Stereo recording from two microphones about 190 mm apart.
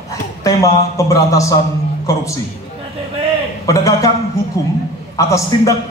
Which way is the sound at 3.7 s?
15° left (ahead or behind).